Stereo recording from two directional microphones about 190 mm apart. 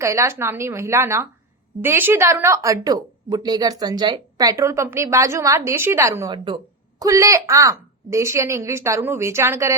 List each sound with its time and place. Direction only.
0.0 s speech: 15° right (ahead or behind)